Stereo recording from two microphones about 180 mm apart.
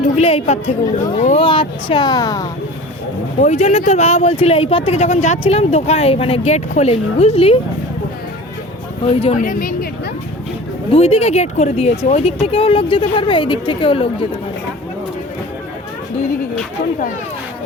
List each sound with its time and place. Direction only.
0.2 s speech: 35° left (ahead or behind)
3.4 s speech: 40° left (ahead or behind)
9.0 s speech: 35° left (ahead or behind)
9.4 s a woman's voice: 50° left (ahead or behind)
10.9 s speech: 35° left (ahead or behind)